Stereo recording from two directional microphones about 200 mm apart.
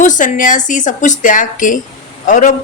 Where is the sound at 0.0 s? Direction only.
40° left (ahead or behind).